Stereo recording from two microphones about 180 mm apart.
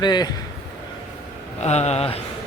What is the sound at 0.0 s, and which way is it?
Speech, 25° left (ahead or behind).